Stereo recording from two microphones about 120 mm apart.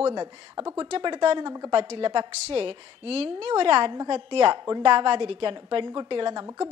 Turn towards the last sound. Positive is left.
turn(degrees=-40)  # may be behind; listen again after turning